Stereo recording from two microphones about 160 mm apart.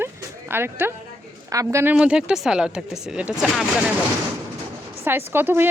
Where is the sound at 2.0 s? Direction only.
5° right (ahead or behind).